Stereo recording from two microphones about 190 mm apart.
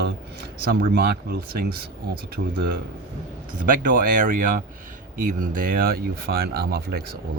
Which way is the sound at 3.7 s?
45° right (ahead or behind).